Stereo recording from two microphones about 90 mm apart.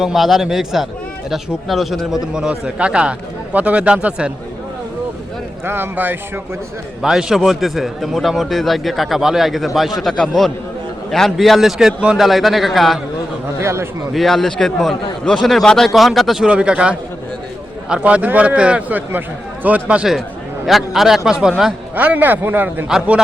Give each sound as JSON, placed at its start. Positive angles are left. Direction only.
{"t": 0.0, "sound": "a man's voice", "side_deg": 0}
{"t": 5.6, "sound": "a man's voice", "side_deg": -25}
{"t": 7.0, "sound": "a man's voice", "side_deg": -5}
{"t": 13.6, "sound": "a man's voice", "side_deg": -30}
{"t": 14.1, "sound": "a man's voice", "side_deg": 0}
{"t": 20.7, "sound": "a man's voice", "side_deg": 0}